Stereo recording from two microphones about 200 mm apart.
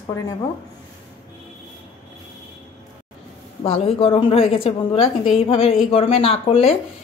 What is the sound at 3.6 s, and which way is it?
A woman's voice, 30° left (ahead or behind).